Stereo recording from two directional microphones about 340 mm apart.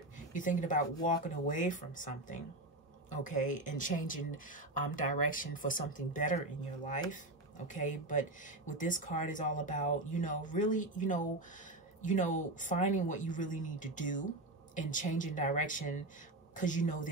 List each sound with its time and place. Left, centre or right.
0.3 s speech: left